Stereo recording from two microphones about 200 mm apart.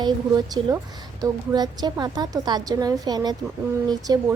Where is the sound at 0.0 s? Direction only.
20° right (ahead or behind).